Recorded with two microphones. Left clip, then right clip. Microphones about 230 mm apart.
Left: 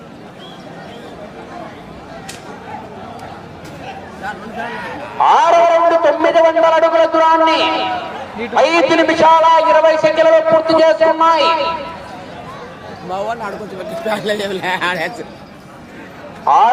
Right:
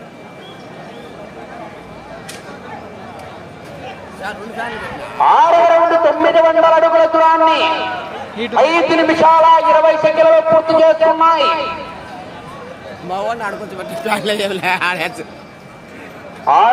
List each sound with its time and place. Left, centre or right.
5.1 s a man's voice: left
13.1 s a man's voice: right
16.5 s a man's voice: left